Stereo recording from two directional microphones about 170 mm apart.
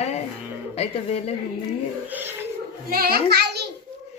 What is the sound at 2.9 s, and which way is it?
Speech, 60° right (ahead or behind).